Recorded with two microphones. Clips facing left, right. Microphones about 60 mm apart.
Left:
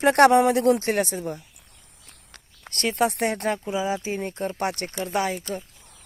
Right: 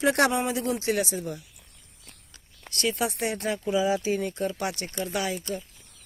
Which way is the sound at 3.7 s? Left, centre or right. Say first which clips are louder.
Right 2 dB; left.